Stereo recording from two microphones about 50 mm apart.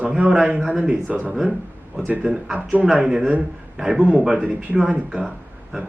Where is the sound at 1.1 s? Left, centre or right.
Right.